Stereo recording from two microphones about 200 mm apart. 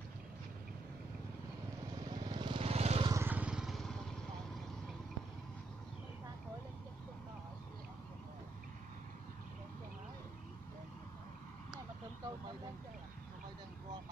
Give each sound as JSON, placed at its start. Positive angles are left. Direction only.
{"t": 2.0, "sound": "vehicle", "side_deg": -20}
{"t": 3.1, "sound": "vehicle", "side_deg": -10}